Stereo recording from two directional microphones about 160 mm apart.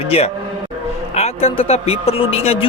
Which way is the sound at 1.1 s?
40° left (ahead or behind).